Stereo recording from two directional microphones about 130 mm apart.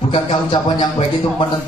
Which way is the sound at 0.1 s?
40° left (ahead or behind).